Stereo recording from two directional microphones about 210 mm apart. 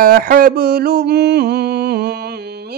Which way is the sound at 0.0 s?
45° right (ahead or behind).